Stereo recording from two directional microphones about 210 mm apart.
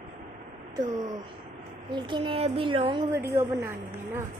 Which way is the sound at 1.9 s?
20° right (ahead or behind).